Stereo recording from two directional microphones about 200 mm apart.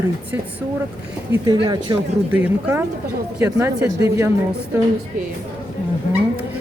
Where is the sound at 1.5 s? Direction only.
25° right (ahead or behind).